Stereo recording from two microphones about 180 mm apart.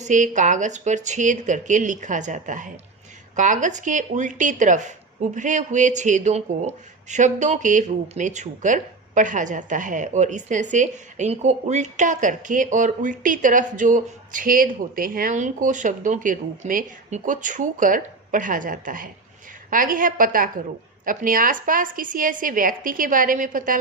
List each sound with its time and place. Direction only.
0.0 s speech: 45° right (ahead or behind)